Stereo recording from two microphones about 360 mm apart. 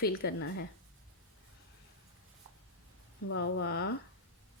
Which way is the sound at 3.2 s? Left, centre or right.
Left.